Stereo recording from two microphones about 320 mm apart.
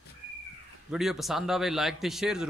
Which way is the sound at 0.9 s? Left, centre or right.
Centre.